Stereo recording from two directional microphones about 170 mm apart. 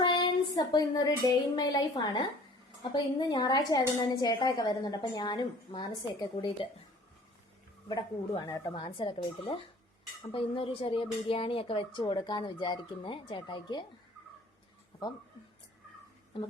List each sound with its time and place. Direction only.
0.0 s a sound: 25° left (ahead or behind)
1.5 s a woman's voice: 25° left (ahead or behind)
8.4 s a woman's voice: 25° left (ahead or behind)